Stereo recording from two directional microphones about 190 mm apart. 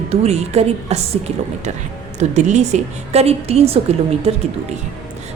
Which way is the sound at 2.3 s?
35° right (ahead or behind).